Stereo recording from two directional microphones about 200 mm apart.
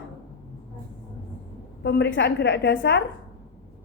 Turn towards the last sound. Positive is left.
turn(degrees=55)  # may be behind; listen again after turning